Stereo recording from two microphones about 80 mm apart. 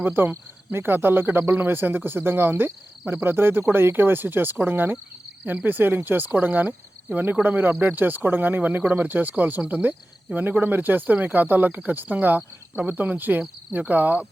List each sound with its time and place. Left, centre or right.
0.0 s speech: right